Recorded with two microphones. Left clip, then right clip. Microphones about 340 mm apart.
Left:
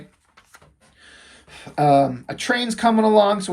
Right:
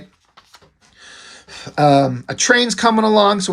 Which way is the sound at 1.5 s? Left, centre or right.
Right.